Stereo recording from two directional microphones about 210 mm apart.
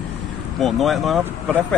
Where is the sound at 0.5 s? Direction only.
Centre (ahead or behind).